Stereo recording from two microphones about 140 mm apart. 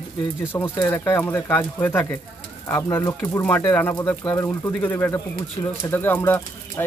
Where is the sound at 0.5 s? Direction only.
15° left (ahead or behind).